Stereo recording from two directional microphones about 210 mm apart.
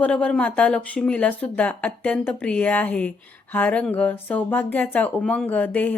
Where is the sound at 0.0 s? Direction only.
5° left (ahead or behind).